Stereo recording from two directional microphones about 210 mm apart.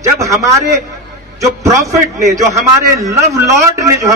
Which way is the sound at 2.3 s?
15° right (ahead or behind).